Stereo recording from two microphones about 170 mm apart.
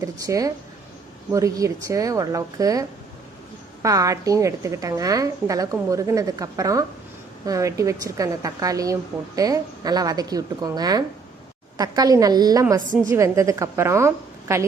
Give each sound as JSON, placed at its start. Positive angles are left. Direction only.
{"t": 0.0, "sound": "a woman's voice", "side_deg": -20}
{"t": 3.8, "sound": "a woman's voice", "side_deg": -20}